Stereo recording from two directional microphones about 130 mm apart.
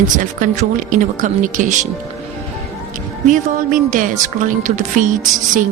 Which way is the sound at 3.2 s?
75° right (ahead or behind).